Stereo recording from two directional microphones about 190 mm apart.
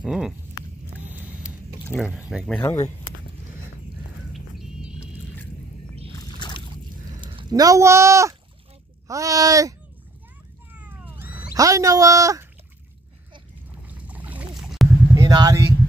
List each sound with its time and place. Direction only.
0.0 s a sound: centre (ahead or behind)
2.0 s speech: 5° right (ahead or behind)
2.6 s speech: 15° left (ahead or behind)
4.3 s music: centre (ahead or behind)
6.1 s rowboat: 20° left (ahead or behind)
7.2 s speech: 25° right (ahead or behind)
10.7 s cat: 10° right (ahead or behind)
11.5 s speech: 15° right (ahead or behind)
13.8 s boat: 10° right (ahead or behind)
15.1 s speech: 20° right (ahead or behind)